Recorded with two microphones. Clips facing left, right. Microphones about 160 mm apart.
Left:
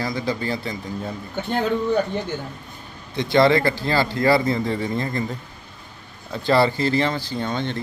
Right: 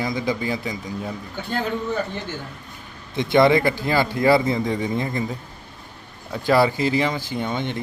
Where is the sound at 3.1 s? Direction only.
20° right (ahead or behind).